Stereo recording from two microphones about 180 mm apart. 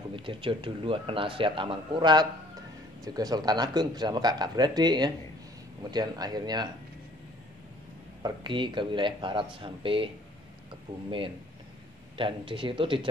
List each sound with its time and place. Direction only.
0.1 s speech: 30° right (ahead or behind)
8.2 s speech: 25° right (ahead or behind)